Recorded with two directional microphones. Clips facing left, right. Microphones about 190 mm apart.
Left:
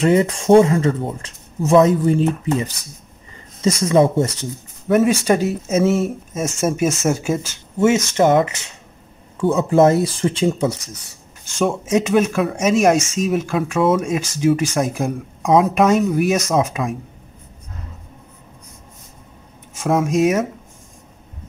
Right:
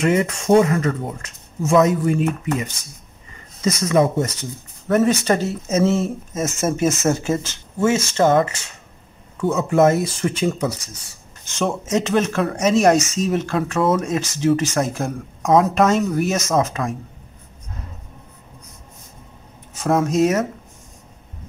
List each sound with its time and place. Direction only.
0.0 s speech: 30° left (ahead or behind)
4.8 s speech: 5° left (ahead or behind)
9.4 s speech: 30° left (ahead or behind)
11.4 s speech: 10° left (ahead or behind)
15.4 s speech: centre (ahead or behind)
15.7 s speech: 10° left (ahead or behind)
19.8 s speech: centre (ahead or behind)